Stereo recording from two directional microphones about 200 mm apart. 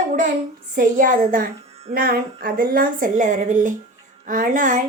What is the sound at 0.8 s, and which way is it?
A child's voice, 40° right (ahead or behind).